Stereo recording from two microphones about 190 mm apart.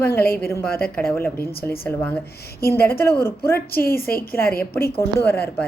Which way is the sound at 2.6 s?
55° left (ahead or behind).